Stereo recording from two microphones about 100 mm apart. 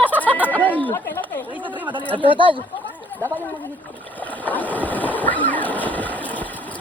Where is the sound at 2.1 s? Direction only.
75° right (ahead or behind).